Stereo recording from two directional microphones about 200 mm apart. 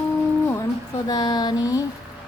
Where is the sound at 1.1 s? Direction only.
20° left (ahead or behind).